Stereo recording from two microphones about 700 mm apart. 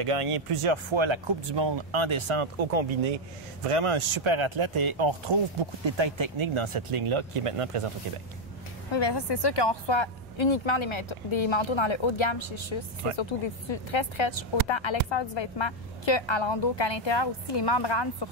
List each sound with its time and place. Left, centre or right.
0.0 s speech: right
8.9 s speech: left